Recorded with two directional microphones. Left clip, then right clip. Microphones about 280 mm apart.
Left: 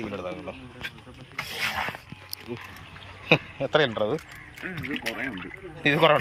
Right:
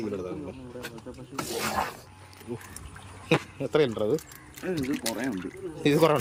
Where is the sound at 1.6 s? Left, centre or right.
Right.